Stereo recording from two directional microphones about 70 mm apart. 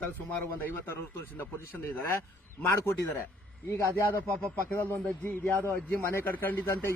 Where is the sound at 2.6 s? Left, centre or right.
Left.